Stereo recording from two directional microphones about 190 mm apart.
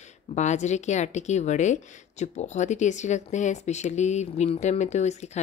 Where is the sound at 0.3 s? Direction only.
40° left (ahead or behind).